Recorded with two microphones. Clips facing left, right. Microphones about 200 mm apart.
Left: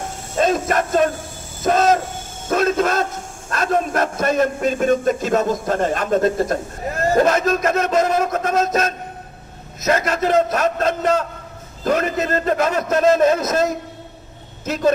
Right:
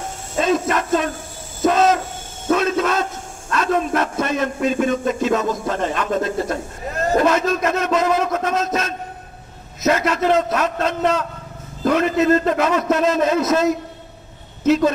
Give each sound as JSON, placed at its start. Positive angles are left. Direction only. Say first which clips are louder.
{"t": 0.4, "sound": "music", "louder": "left 1 dB", "side_deg": 45}
{"t": 1.7, "sound": "owl", "louder": "left 1 dB", "side_deg": 45}
{"t": 2.5, "sound": "a man's voice", "louder": "left 1 dB", "side_deg": 45}